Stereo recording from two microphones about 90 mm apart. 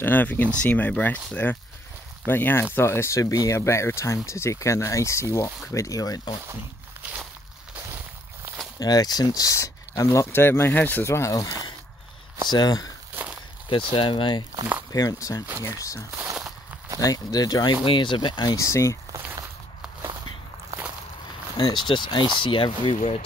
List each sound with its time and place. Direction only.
0.0 s speech: 20° left (ahead or behind); by 6.2 s 40° left (ahead or behind)
8.7 s speech: 45° left (ahead or behind)
13.1 s walk: 20° right (ahead or behind)
13.7 s speech: 70° left (ahead or behind)
14.9 s speech: 40° left (ahead or behind)
17.8 s speech: 65° left (ahead or behind)
18.4 s speech: 40° left (ahead or behind)
21.5 s speech: 65° left (ahead or behind)